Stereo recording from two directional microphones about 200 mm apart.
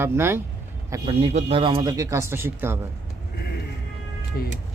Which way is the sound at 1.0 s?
30° right (ahead or behind).